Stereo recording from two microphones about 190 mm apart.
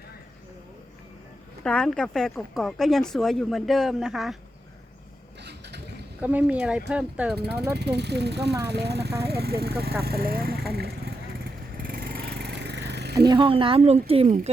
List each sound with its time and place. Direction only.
1.6 s speech: 5° left (ahead or behind)
5.4 s vehicle: 60° right (ahead or behind)
6.2 s speech: 10° right (ahead or behind)
7.3 s speech: 60° right (ahead or behind)
10.7 s vehicle: 55° right (ahead or behind)
13.2 s speech: 25° right (ahead or behind)